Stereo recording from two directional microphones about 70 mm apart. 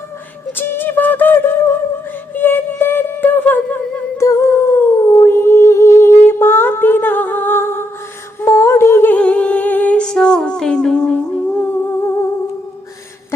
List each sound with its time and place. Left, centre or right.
0.5 s beatboxing: left
2.3 s a sound: left
4.2 s humming: left
9.1 s music: centre
10.0 s music: centre
11.6 s humming: left